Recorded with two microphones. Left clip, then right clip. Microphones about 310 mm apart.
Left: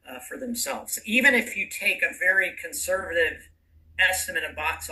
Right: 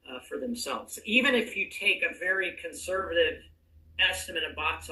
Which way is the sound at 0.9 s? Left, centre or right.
Left.